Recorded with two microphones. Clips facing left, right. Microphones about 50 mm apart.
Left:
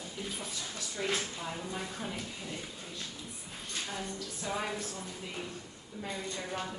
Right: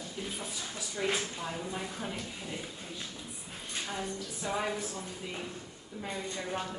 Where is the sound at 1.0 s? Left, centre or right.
Centre.